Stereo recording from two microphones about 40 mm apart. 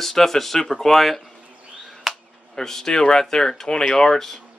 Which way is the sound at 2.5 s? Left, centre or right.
Centre.